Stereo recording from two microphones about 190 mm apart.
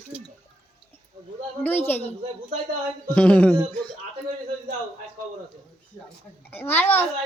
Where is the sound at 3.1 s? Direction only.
5° left (ahead or behind).